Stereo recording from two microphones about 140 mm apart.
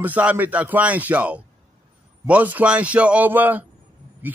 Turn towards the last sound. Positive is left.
turn(degrees=-10)  # may be behind; listen again after turning